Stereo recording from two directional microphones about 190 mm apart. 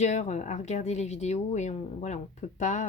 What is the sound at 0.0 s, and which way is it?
Speech, 35° left (ahead or behind).